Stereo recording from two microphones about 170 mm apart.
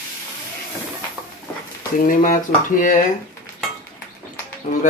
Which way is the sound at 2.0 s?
55° left (ahead or behind).